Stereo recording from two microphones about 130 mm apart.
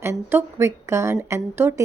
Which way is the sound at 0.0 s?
20° right (ahead or behind).